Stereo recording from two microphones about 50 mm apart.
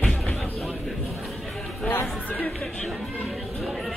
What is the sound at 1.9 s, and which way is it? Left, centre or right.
Chatter, left.